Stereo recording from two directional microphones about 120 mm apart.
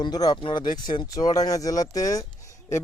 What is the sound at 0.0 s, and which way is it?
Speech, 35° left (ahead or behind).